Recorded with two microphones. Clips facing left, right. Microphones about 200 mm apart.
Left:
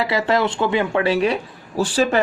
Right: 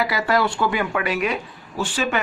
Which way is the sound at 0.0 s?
25° left (ahead or behind).